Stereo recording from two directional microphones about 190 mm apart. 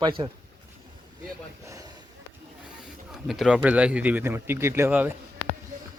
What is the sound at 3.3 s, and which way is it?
Speech, 5° right (ahead or behind).